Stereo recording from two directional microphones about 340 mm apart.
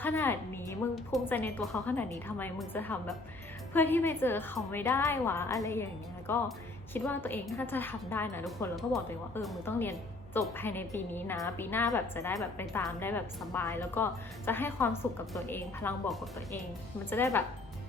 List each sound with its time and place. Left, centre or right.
0.0 s a woman's voice: centre